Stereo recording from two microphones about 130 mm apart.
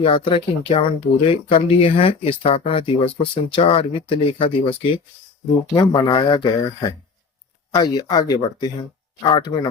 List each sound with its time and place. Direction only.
0.0 s speech: 45° left (ahead or behind)
5.7 s speech: 30° left (ahead or behind)